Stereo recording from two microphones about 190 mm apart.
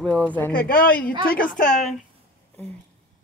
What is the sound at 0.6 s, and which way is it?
A woman's voice, 50° left (ahead or behind).